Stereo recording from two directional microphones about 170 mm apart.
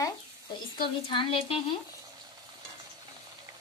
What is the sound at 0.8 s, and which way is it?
Speech, 30° left (ahead or behind).